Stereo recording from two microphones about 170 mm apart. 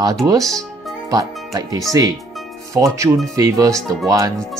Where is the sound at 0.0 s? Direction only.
20° right (ahead or behind).